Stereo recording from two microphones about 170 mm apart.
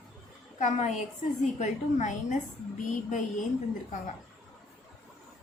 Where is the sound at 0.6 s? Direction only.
45° left (ahead or behind).